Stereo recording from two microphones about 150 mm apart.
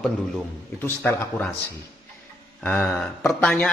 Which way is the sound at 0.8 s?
15° left (ahead or behind).